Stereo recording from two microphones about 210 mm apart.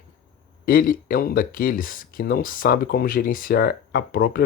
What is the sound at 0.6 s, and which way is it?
Speech, 45° left (ahead or behind).